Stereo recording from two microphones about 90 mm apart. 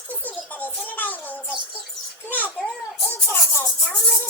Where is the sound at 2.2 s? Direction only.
20° left (ahead or behind).